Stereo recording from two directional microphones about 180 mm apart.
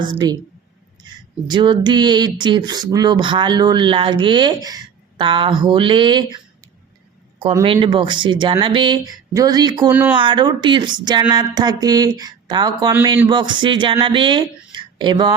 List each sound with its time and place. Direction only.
0.0 s speech: 25° right (ahead or behind)
1.5 s speech: 25° right (ahead or behind)
7.6 s speech: 30° right (ahead or behind)
9.9 s speech: 10° right (ahead or behind)
10.2 s speech: 25° right (ahead or behind)